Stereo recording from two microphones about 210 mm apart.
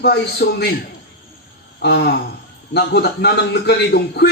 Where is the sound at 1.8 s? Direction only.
50° left (ahead or behind).